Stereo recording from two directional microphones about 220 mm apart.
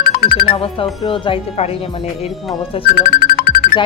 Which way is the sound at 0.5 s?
25° left (ahead or behind).